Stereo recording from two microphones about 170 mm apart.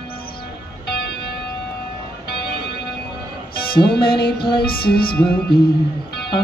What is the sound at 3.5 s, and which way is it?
Music, 65° left (ahead or behind).